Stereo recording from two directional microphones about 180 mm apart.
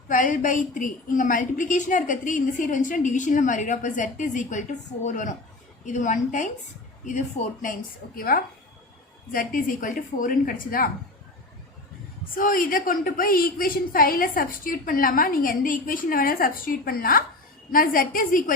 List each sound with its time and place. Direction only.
0.1 s a woman's voice: 45° left (ahead or behind)
12.4 s a woman's voice: 50° left (ahead or behind)